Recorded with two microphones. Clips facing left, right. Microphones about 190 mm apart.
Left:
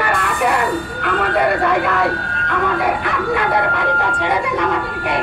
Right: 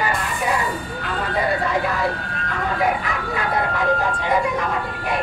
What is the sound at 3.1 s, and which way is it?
Speech, 70° left (ahead or behind).